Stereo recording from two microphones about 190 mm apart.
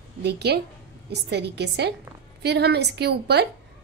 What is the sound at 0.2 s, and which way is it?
A woman's voice, 60° right (ahead or behind).